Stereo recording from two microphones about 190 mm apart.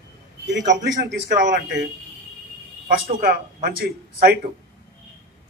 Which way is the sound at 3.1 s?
50° right (ahead or behind).